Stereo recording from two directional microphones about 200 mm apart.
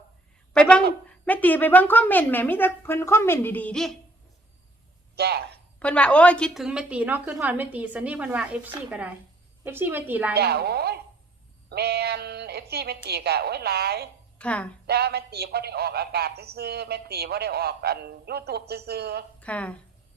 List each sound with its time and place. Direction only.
0.5 s a sound: 5° left (ahead or behind)
1.2 s speech: 10° left (ahead or behind)
5.1 s a man's voice: 55° right (ahead or behind)
5.8 s a woman's voice: 5° left (ahead or behind)
10.3 s a woman's voice: 55° right (ahead or behind)
14.3 s a woman's voice: 5° left (ahead or behind)
14.8 s a woman's voice: 55° right (ahead or behind)
19.4 s speech: 5° left (ahead or behind)